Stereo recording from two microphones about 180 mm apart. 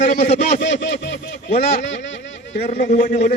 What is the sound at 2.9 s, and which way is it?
Speech, 45° left (ahead or behind).